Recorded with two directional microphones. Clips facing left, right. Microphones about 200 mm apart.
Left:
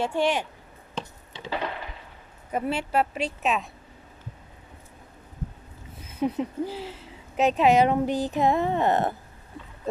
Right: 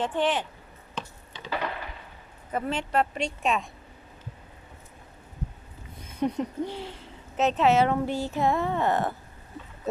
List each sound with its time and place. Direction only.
0.0 s speech: 10° left (ahead or behind)
0.9 s a sound: 25° left (ahead or behind)
2.5 s speech: 10° left (ahead or behind)
6.0 s speech: 5° left (ahead or behind); by 9.1 s 20° left (ahead or behind)
9.9 s speech: 5° right (ahead or behind)